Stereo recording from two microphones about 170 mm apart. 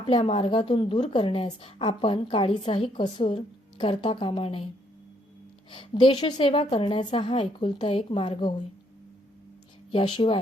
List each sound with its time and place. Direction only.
0.0 s a woman's voice: 35° left (ahead or behind)
5.7 s a woman's voice: 30° left (ahead or behind)
10.2 s a woman's voice: 30° left (ahead or behind)